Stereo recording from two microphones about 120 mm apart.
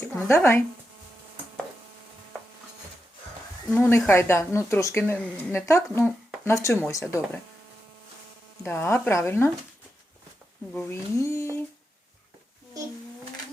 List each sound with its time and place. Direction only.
0.0 s a woman's voice: 20° left (ahead or behind)
3.8 s a woman's voice: 20° left (ahead or behind)
8.6 s a woman's voice: 20° left (ahead or behind)
10.8 s a woman's voice: 20° left (ahead or behind)